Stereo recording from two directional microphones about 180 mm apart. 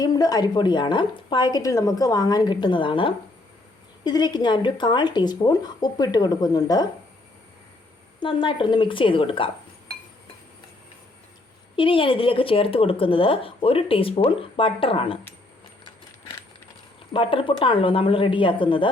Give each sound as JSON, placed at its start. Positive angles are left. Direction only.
{"t": 0.0, "sound": "speech", "side_deg": 20}
{"t": 8.2, "sound": "speech", "side_deg": 25}
{"t": 11.8, "sound": "speech", "side_deg": 30}
{"t": 17.1, "sound": "speech", "side_deg": 30}